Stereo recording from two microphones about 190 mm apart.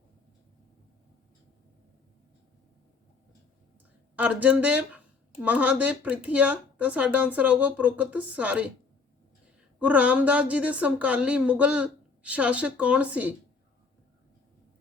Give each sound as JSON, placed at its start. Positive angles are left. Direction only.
{"t": 4.1, "sound": "speech", "side_deg": -5}
{"t": 9.8, "sound": "speech", "side_deg": -5}